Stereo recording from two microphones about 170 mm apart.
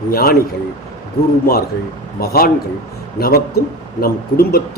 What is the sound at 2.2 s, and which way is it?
A man's voice, 65° left (ahead or behind).